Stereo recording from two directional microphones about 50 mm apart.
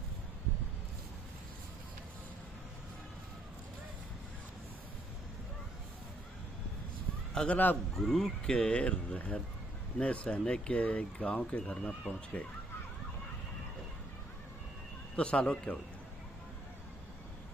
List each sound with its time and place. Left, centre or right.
7.4 s a man's voice: left
7.9 s speech: centre
8.5 s speech: left
15.1 s speech: left